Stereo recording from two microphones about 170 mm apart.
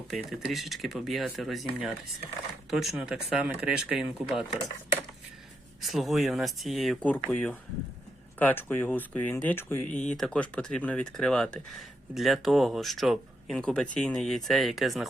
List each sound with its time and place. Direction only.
0.1 s speech: centre (ahead or behind)
5.8 s speech: centre (ahead or behind)